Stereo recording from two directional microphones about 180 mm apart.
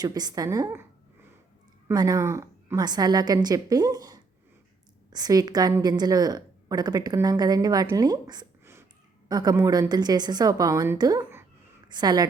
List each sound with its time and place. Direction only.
0.0 s a woman's voice: 20° right (ahead or behind)
1.9 s a woman's voice: 20° right (ahead or behind)